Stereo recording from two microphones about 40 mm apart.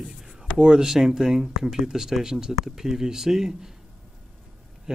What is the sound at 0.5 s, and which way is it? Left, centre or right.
Speech, centre.